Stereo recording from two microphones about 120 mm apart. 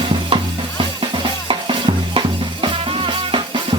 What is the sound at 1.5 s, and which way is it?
Music, 45° right (ahead or behind).